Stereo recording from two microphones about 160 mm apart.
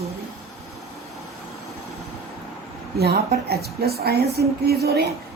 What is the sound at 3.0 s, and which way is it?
A woman's voice, 85° right.